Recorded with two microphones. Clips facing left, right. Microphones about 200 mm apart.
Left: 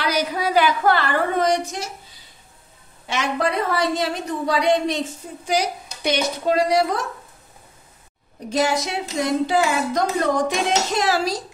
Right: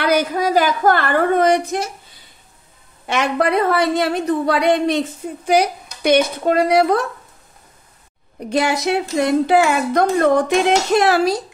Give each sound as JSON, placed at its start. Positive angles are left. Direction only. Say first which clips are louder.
{"t": 0.0, "sound": "a sound", "louder": "right 5 dB", "side_deg": -50}
{"t": 3.1, "sound": "a woman's voice", "louder": "right 5 dB", "side_deg": -60}
{"t": 8.5, "sound": "a woman's voice", "louder": "right 3 dB", "side_deg": -60}